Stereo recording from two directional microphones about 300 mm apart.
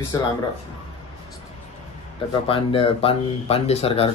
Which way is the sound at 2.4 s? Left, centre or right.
Centre.